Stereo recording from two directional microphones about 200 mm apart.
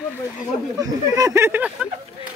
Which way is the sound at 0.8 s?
15° right (ahead or behind).